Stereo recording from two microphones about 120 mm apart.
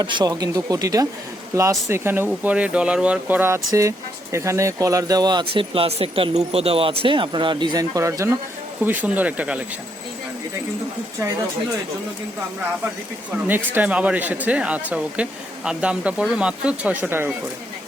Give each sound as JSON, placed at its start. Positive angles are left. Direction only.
{"t": 0.0, "sound": "speech", "side_deg": -35}
{"t": 8.8, "sound": "speech", "side_deg": -15}
{"t": 13.5, "sound": "speech", "side_deg": -15}